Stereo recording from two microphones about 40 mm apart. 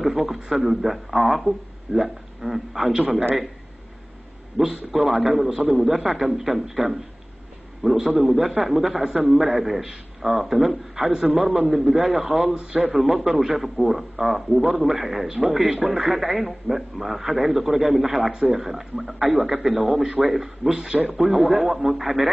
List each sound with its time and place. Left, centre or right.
0.0 s speech: centre
3.0 s a man's voice: right
4.6 s a man's voice: centre
7.8 s a man's voice: centre
8.2 s a man's voice: centre
18.3 s a man's voice: centre